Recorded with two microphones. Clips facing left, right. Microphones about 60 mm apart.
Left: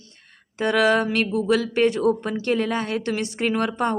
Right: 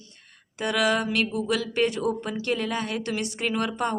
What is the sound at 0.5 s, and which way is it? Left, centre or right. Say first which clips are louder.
Speech: left 5 dB; left.